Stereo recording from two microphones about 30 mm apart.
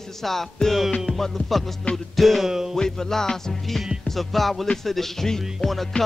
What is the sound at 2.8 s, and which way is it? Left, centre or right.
Music, centre.